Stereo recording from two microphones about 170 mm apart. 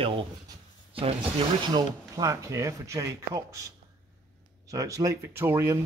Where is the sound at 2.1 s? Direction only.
20° right (ahead or behind).